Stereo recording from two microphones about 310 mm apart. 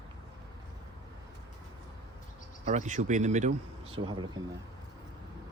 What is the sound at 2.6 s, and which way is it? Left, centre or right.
Speech, right.